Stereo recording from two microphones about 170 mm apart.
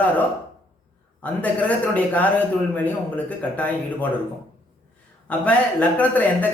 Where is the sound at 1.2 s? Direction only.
10° left (ahead or behind).